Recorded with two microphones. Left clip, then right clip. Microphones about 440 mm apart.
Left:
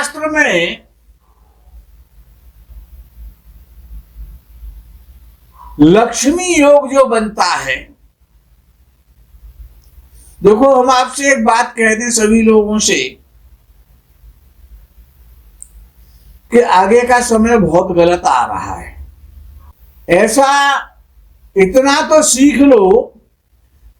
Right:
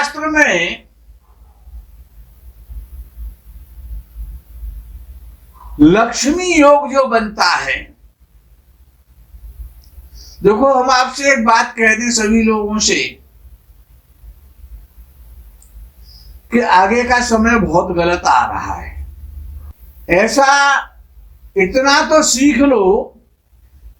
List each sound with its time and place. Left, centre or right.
0.0 s a woman's voice: centre
5.8 s a man's voice: centre
10.4 s a man's voice: centre
16.5 s a man's voice: centre
20.1 s a man's voice: centre